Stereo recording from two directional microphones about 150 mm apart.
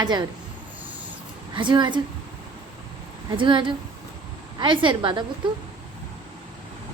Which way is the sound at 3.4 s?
35° right (ahead or behind).